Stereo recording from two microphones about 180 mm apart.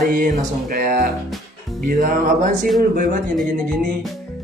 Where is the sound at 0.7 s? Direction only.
55° right (ahead or behind).